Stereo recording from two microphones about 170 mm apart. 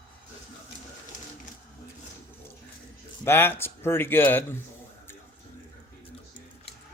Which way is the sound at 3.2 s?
15° left (ahead or behind).